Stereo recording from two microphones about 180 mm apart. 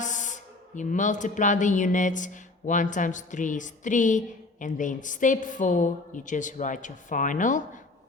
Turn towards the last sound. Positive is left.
turn(degrees=45)  # may be behind; listen again after turning